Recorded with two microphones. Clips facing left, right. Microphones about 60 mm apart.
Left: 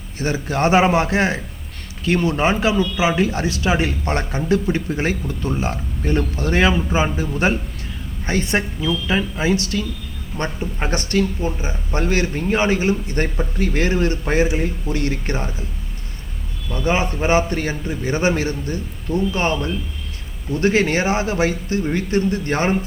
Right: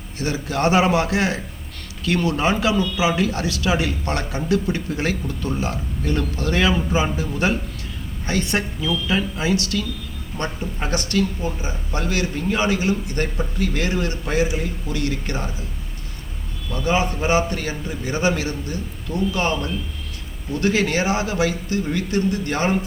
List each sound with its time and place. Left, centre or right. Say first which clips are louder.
0.2 s a man's voice: left 2 dB; left
8.8 s speech: left 1 dB; centre
10.3 s a man's voice: left 2 dB; centre
10.8 s a man's voice: left 2 dB; left
16.7 s a man's voice: left 1 dB; left